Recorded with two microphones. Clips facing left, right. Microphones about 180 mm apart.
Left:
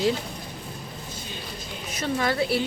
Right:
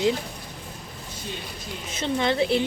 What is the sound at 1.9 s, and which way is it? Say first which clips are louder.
Speech: right 1 dB; 25° right (ahead or behind).